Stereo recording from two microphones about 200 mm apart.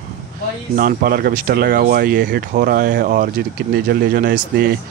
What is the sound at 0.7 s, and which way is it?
Speech, 50° right (ahead or behind).